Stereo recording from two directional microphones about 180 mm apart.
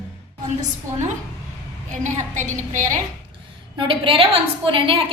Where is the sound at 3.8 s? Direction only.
30° right (ahead or behind).